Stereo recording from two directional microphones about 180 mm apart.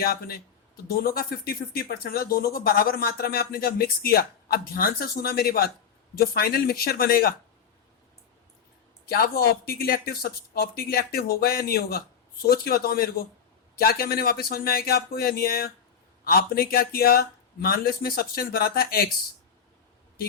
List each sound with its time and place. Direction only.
0.0 s speech: 55° left (ahead or behind)
9.0 s speech: 60° left (ahead or behind)